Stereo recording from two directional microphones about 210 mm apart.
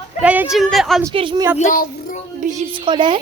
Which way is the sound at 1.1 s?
25° right (ahead or behind).